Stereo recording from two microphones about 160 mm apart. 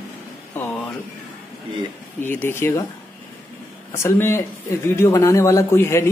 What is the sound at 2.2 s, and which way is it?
Speech, 15° left (ahead or behind).